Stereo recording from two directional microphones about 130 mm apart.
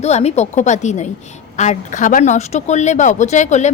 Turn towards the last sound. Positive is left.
turn(degrees=65)  # may be behind; listen again after turning